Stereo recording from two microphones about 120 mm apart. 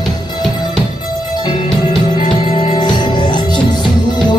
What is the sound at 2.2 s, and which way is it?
Music, 50° left (ahead or behind).